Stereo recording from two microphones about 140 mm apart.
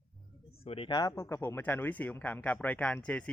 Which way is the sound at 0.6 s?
45° left (ahead or behind).